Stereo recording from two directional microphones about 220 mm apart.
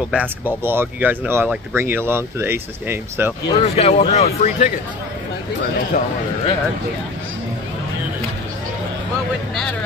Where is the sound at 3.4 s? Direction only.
25° left (ahead or behind).